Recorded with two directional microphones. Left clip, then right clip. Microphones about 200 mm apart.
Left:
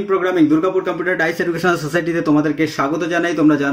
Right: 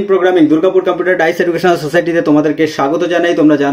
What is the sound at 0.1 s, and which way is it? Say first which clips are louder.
Speech: right 5 dB; 10° left (ahead or behind).